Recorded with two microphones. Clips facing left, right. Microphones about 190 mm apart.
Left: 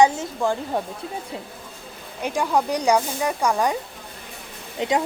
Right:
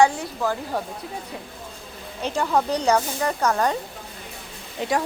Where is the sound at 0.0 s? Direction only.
25° left (ahead or behind).